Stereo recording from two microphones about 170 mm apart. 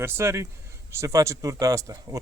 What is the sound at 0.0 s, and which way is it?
Speech, 15° right (ahead or behind).